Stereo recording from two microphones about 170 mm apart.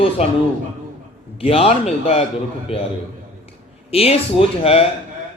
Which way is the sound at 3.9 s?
35° left (ahead or behind).